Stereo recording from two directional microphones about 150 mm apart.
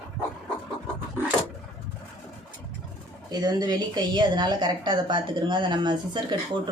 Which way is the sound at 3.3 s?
25° right (ahead or behind).